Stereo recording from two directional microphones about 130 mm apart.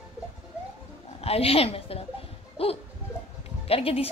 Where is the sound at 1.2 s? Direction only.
50° left (ahead or behind).